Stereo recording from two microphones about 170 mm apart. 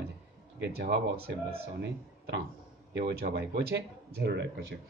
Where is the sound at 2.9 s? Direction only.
70° right (ahead or behind).